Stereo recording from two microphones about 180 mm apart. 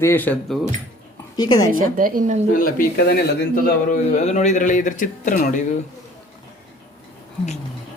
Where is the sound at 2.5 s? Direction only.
50° left (ahead or behind).